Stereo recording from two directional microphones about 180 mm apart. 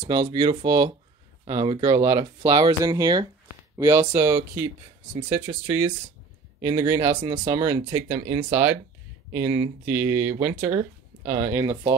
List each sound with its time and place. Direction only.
0.0 s speech: 25° right (ahead or behind)